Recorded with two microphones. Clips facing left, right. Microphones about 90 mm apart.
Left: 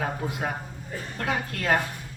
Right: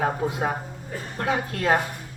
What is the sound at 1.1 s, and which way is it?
Speech, 25° right (ahead or behind).